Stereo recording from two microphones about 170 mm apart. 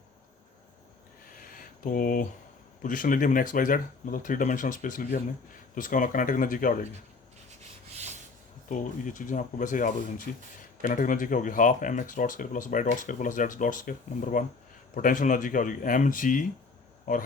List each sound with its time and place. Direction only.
1.3 s a sound: 55° left (ahead or behind)
2.8 s speech: 50° left (ahead or behind)
7.9 s rub: 40° right (ahead or behind)
8.7 s speech: 50° left (ahead or behind)